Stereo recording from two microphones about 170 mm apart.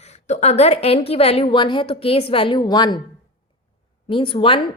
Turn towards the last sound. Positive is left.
turn(degrees=30)  # may be behind; listen again after turning